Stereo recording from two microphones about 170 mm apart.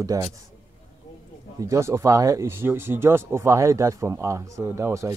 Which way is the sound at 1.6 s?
15° right (ahead or behind).